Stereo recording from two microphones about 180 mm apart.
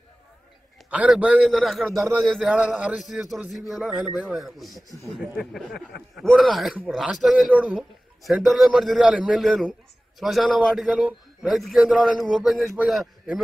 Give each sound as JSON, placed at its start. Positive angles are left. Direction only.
{"t": 0.8, "sound": "a man's voice", "side_deg": -5}